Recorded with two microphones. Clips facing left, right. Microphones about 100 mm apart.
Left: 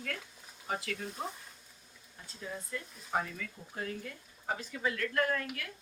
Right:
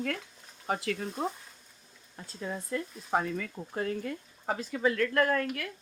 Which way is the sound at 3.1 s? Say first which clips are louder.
Right 5 dB; 75° right (ahead or behind).